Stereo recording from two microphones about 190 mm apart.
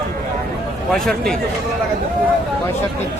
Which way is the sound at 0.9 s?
Centre (ahead or behind).